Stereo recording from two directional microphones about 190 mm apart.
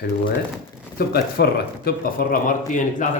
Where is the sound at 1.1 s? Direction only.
55° left (ahead or behind).